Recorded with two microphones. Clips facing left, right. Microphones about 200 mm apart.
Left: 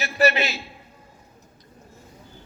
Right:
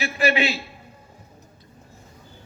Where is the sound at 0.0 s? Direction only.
40° left (ahead or behind).